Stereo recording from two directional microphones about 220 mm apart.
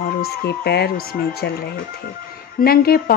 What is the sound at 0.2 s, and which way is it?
Speech, 45° left (ahead or behind).